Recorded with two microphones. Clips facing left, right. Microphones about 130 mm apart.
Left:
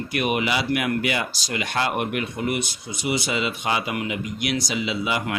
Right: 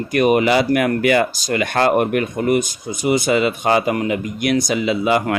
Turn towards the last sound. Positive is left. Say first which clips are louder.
# right 8 dB
turn(degrees=-50)  # may be behind; listen again after turning